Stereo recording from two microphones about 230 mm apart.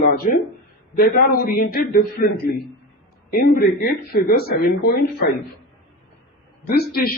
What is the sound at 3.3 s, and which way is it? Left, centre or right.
Speech, left.